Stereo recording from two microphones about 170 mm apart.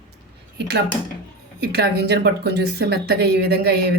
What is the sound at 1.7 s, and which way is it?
Speech, 75° right (ahead or behind).